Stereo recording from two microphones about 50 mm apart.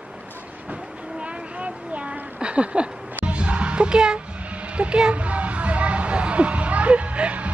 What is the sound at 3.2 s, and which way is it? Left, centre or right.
Music, right.